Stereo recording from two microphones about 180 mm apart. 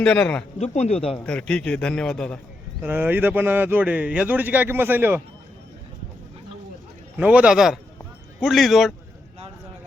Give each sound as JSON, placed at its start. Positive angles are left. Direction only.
{"t": 0.0, "sound": "a man's voice", "side_deg": 5}
{"t": 0.6, "sound": "speech", "side_deg": 40}
{"t": 1.2, "sound": "a man's voice", "side_deg": 5}
{"t": 2.8, "sound": "a man's voice", "side_deg": -10}
{"t": 7.2, "sound": "a man's voice", "side_deg": -5}